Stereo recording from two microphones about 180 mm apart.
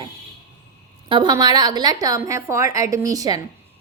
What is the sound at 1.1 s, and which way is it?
A woman's voice, 25° right (ahead or behind).